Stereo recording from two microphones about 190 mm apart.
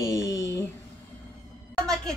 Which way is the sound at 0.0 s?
15° left (ahead or behind).